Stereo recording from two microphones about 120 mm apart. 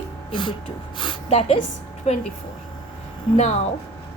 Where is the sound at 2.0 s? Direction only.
65° left (ahead or behind).